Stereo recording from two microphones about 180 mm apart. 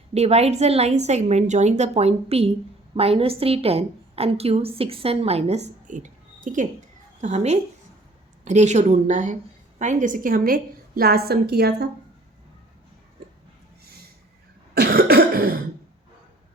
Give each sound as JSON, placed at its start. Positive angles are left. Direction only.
{"t": 0.1, "sound": "a woman's voice", "side_deg": -35}
{"t": 14.8, "sound": "cough", "side_deg": -60}